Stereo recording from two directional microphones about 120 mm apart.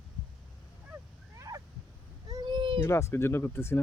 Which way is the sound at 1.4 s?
30° right (ahead or behind).